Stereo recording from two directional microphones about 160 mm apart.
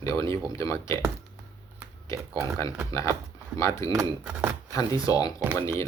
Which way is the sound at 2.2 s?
20° right (ahead or behind).